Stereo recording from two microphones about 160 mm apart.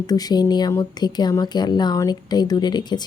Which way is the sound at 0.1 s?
25° left (ahead or behind).